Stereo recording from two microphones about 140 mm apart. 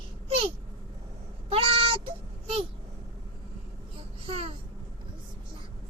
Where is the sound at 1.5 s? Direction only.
40° right (ahead or behind).